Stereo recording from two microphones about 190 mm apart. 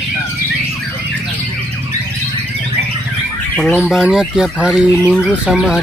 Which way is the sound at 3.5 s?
Centre (ahead or behind).